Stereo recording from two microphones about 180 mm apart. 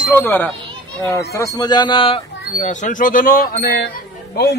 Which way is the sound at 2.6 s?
45° left (ahead or behind).